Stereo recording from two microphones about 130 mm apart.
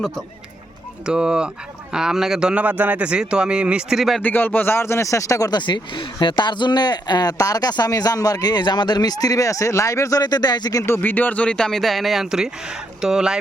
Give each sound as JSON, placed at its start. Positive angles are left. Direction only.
{"t": 1.0, "sound": "a man's voice", "side_deg": -5}
{"t": 4.2, "sound": "speech", "side_deg": 15}